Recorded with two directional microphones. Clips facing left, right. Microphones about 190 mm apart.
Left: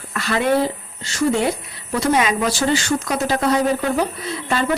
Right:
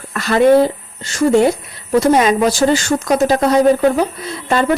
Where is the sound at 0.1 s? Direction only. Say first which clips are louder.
Right 6 dB; 40° right (ahead or behind).